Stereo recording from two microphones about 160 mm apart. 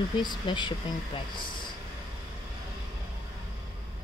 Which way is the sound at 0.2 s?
30° left (ahead or behind).